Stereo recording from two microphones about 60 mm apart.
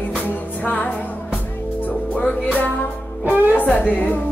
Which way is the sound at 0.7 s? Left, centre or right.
Left.